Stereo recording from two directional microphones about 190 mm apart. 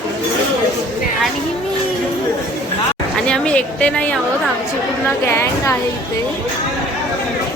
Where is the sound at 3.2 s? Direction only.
5° left (ahead or behind).